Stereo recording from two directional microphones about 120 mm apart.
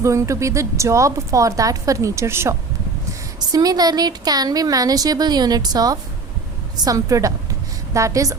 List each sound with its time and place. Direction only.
0.0 s a woman's voice: 25° right (ahead or behind)